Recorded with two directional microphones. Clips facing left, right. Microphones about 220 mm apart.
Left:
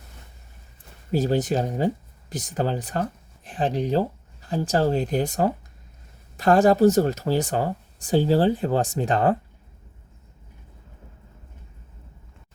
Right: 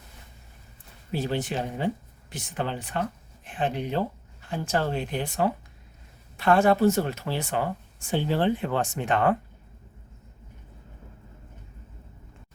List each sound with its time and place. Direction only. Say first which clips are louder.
1.1 s speech: left 6 dB; 40° left (ahead or behind)